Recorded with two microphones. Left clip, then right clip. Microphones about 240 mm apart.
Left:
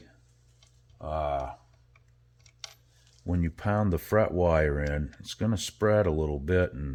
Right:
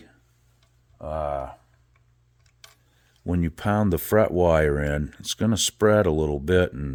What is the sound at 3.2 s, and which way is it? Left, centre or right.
Speech, right.